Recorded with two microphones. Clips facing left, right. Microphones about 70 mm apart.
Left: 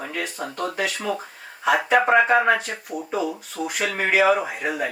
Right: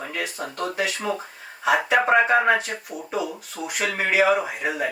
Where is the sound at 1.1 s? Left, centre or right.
Right.